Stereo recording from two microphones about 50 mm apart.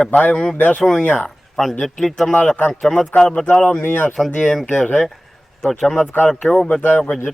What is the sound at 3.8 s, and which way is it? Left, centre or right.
Speech, left.